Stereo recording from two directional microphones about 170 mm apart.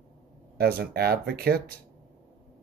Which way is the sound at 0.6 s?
65° right (ahead or behind).